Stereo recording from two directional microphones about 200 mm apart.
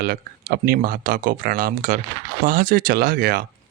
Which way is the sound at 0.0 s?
50° right (ahead or behind).